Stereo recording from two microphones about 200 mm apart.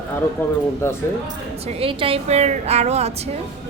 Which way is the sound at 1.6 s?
25° right (ahead or behind).